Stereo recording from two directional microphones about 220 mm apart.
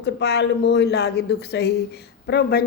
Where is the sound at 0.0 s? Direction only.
50° left (ahead or behind).